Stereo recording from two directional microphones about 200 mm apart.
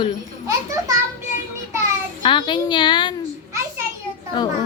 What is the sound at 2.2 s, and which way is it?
Speech, 25° left (ahead or behind).